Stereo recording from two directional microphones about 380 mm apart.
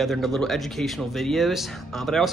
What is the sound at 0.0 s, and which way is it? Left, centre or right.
Speech, centre.